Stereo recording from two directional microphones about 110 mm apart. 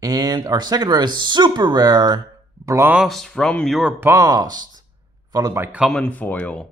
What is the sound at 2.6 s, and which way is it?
Speech, 25° right (ahead or behind).